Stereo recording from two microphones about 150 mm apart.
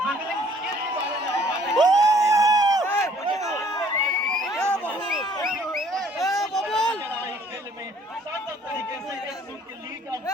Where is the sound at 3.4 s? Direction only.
20° left (ahead or behind).